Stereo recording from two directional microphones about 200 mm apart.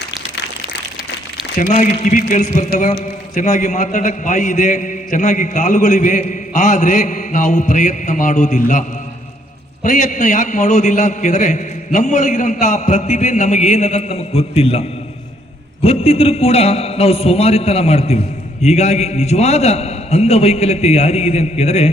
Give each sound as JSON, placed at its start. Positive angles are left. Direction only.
{"t": 1.5, "sound": "a man's voice", "side_deg": 40}
{"t": 9.8, "sound": "a man's voice", "side_deg": 35}